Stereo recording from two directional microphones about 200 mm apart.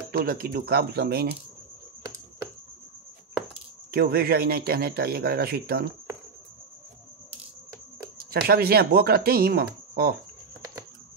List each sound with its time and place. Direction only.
0.1 s speech: 50° right (ahead or behind)
3.9 s speech: 50° right (ahead or behind)
8.2 s speech: 50° right (ahead or behind)